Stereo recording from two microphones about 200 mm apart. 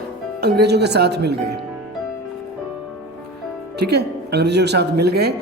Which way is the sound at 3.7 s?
55° right (ahead or behind).